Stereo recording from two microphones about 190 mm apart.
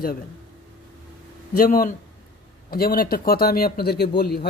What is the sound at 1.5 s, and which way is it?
Speech, 50° left (ahead or behind).